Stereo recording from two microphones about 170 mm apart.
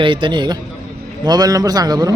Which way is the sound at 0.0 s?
30° right (ahead or behind).